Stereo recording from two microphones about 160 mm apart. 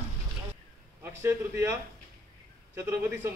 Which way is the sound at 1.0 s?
15° right (ahead or behind).